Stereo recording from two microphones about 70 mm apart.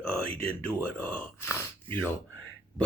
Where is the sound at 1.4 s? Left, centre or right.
Left.